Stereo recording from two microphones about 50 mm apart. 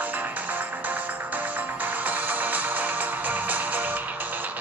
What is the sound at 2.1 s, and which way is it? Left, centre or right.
Music, right.